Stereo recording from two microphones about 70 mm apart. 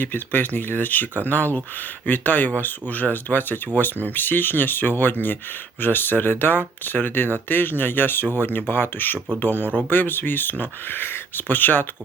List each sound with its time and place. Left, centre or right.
0.0 s speech: left
9.6 s speech: right
9.9 s speech: left